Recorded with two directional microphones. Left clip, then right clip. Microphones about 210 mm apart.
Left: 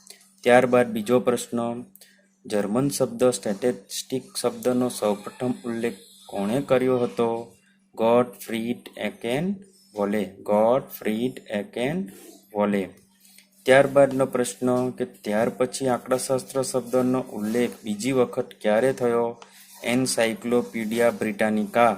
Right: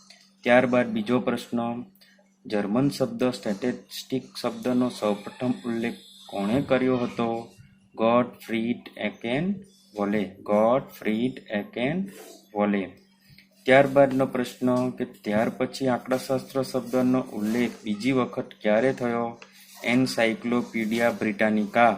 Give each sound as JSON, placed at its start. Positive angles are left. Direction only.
{"t": 0.1, "sound": "speech", "side_deg": 25}